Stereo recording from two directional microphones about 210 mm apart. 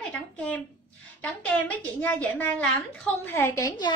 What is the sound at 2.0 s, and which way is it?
A woman's voice, 5° left (ahead or behind).